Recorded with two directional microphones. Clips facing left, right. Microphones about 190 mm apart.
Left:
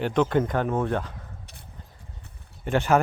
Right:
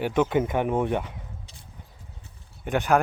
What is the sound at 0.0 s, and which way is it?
Speech, 10° right (ahead or behind).